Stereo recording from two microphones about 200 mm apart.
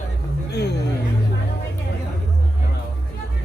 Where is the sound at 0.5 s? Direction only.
55° left (ahead or behind).